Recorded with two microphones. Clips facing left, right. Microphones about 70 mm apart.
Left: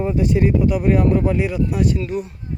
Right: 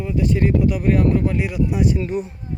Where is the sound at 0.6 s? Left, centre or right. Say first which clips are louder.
Left 1 dB; centre.